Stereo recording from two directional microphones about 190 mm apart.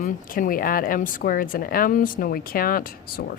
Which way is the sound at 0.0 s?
50° left (ahead or behind).